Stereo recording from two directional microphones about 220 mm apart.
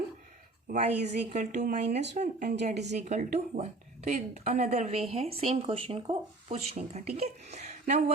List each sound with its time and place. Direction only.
0.7 s speech: 30° right (ahead or behind)